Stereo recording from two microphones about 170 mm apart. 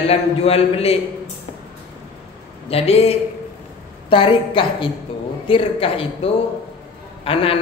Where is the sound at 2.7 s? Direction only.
35° left (ahead or behind).